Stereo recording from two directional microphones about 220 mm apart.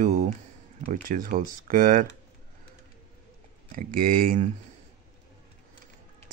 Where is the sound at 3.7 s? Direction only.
40° right (ahead or behind).